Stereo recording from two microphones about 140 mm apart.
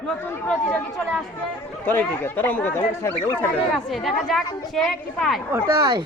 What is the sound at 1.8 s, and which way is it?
Speech, 15° left (ahead or behind).